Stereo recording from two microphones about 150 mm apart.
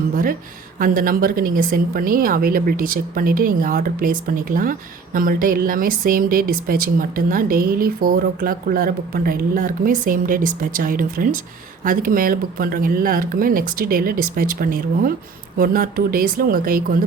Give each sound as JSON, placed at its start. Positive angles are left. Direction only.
{"t": 0.1, "sound": "a woman's voice", "side_deg": -70}